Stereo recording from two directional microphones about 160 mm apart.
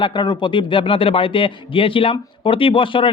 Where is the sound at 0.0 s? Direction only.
30° left (ahead or behind).